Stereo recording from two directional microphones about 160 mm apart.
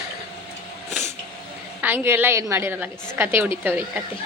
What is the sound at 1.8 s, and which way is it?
A woman's voice, 15° right (ahead or behind).